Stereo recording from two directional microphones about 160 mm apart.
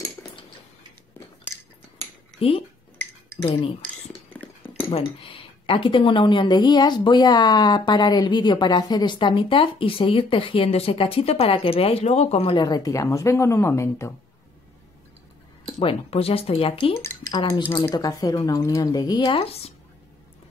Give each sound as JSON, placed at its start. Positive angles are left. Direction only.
{"t": 2.4, "sound": "speech", "side_deg": 35}
{"t": 3.4, "sound": "cutlery", "side_deg": 35}
{"t": 4.3, "sound": "a sound", "side_deg": 10}
{"t": 4.9, "sound": "speech", "side_deg": 35}
{"t": 12.6, "sound": "speech", "side_deg": 20}
{"t": 15.8, "sound": "speech", "side_deg": 35}
{"t": 17.0, "sound": "speech", "side_deg": 15}
{"t": 17.3, "sound": "speech", "side_deg": 30}